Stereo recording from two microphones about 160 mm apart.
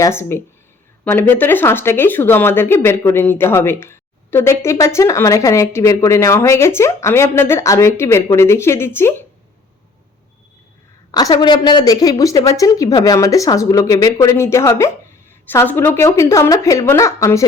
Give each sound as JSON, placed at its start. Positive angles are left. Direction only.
{"t": 0.0, "sound": "speech", "side_deg": 15}
{"t": 11.1, "sound": "a woman's voice", "side_deg": 25}